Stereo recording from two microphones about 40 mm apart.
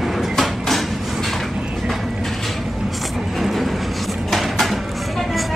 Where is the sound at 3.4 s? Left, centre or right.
Centre.